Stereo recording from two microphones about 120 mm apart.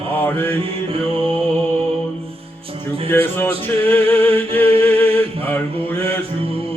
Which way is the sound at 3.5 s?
50° right (ahead or behind).